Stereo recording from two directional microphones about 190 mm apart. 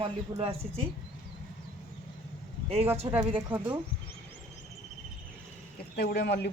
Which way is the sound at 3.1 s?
25° right (ahead or behind).